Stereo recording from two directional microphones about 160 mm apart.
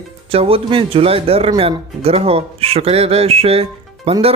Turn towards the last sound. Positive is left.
turn(degrees=-40)  # may be behind; listen again after turning